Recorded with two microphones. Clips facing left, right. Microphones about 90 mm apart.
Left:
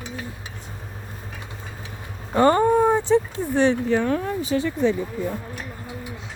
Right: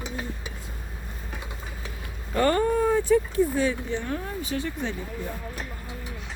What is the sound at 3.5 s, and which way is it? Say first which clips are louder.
Speech: left 7 dB; 75° left (ahead or behind).